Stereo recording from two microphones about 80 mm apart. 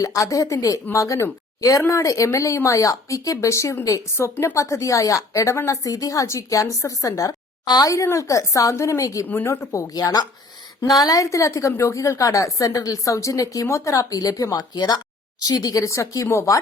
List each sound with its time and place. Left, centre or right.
0.0 s a woman's voice: left
9.2 s a woman's voice: left
9.8 s a woman's voice: left